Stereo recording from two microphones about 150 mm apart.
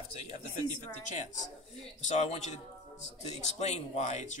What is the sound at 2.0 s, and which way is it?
A man's voice, 50° left (ahead or behind).